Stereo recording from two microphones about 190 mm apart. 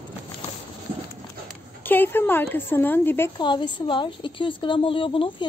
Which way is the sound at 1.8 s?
10° left (ahead or behind).